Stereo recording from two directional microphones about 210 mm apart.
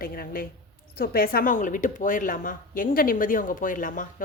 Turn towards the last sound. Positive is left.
turn(degrees=40)  # may be behind; listen again after turning